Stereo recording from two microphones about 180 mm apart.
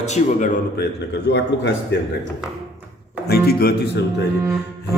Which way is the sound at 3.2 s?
60° left (ahead or behind).